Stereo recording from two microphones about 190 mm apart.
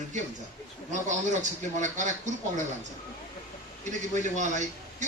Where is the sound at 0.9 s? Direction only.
40° right (ahead or behind).